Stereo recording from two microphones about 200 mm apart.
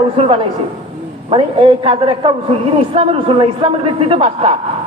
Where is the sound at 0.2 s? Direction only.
25° right (ahead or behind).